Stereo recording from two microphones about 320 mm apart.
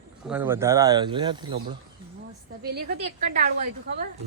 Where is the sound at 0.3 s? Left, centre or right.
Centre.